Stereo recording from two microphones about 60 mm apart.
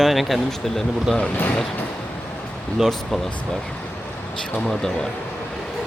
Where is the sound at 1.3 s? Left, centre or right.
Left.